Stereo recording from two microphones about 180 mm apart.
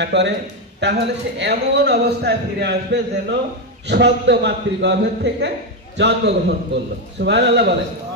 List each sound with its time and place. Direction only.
0.0 s a man's voice: 75° right (ahead or behind)